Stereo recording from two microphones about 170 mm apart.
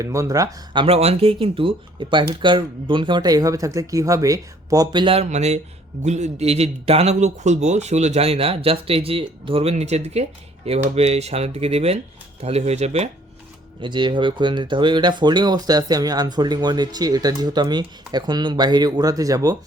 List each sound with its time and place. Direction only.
0.0 s speech: 20° right (ahead or behind); by 13.1 s 40° right (ahead or behind)
13.8 s speech: 30° right (ahead or behind)